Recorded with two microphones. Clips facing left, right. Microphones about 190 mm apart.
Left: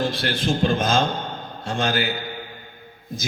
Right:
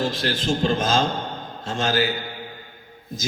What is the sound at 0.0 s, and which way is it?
A man's voice, 55° left (ahead or behind).